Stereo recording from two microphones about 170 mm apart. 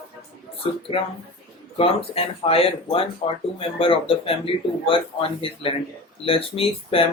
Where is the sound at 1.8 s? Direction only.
35° left (ahead or behind).